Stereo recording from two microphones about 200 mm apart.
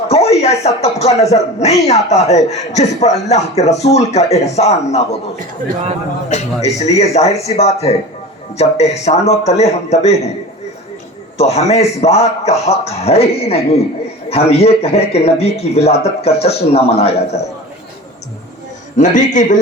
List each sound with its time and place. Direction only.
0.1 s speech: 30° left (ahead or behind)
6.2 s speech: 35° left (ahead or behind)
11.3 s speech: 35° left (ahead or behind)
18.9 s speech: 35° left (ahead or behind)